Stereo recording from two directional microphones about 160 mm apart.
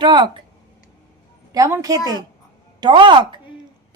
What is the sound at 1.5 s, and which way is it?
A woman's voice, 20° right (ahead or behind).